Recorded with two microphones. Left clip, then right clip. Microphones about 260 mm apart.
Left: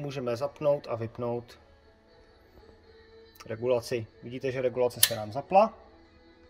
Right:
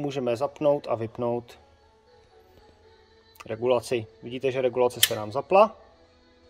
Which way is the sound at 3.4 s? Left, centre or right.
Centre.